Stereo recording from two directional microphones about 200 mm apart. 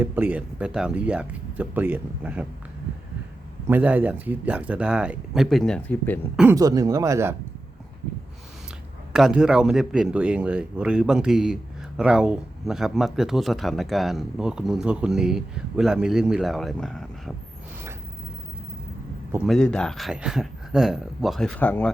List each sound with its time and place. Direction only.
0.0 s speech: 10° right (ahead or behind)
3.7 s speech: 10° right (ahead or behind)
6.3 s speech: 5° right (ahead or behind)
6.6 s speech: 20° right (ahead or behind)
9.1 s speech: 5° right (ahead or behind)
19.5 s speech: 5° left (ahead or behind)